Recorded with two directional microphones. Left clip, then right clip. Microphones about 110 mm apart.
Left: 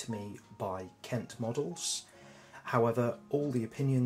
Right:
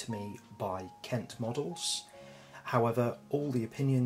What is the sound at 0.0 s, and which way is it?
Speech, 15° right (ahead or behind).